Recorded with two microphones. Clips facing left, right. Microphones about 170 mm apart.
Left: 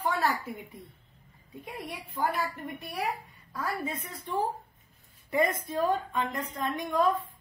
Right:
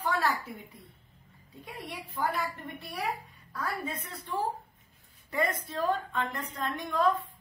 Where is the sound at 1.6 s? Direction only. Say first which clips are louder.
Left 2 dB; 20° left (ahead or behind).